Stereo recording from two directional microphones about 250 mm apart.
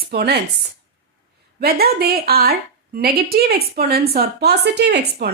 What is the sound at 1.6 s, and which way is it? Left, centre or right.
A woman's voice, right.